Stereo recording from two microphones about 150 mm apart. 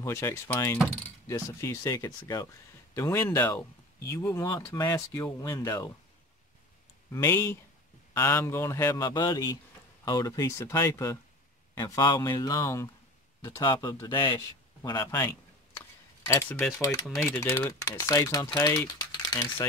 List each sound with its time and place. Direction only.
0.0 s speech: 20° left (ahead or behind)
7.1 s speech: 20° left (ahead or behind)
16.3 s speech: 15° left (ahead or behind)
17.0 s speech: centre (ahead or behind)
17.3 s speech: 15° left (ahead or behind)